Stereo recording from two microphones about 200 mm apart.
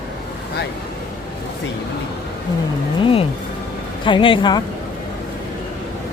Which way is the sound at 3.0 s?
30° left (ahead or behind).